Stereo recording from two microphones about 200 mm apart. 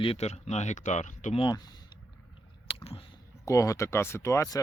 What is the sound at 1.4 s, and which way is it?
Speech, 20° left (ahead or behind).